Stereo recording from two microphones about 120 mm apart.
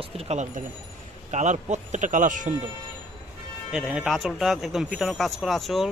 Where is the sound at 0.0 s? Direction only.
65° right (ahead or behind); by 2.5 s 90° right.